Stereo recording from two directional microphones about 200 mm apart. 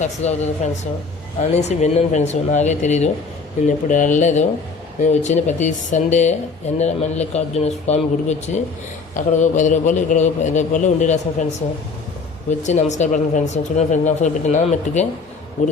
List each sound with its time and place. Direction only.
0.0 s speech: 35° left (ahead or behind)